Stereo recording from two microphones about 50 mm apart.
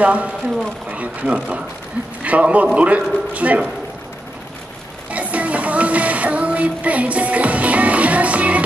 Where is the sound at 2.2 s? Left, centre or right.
Right.